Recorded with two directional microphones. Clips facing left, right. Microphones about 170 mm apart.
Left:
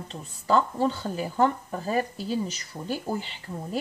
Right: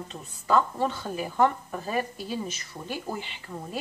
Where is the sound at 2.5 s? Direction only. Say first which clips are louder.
Left 3 dB; 35° left (ahead or behind).